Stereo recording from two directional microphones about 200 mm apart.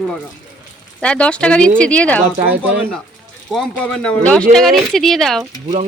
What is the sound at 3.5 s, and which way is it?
Speech, 5° left (ahead or behind).